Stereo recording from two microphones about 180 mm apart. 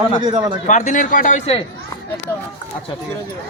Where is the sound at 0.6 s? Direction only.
45° left (ahead or behind).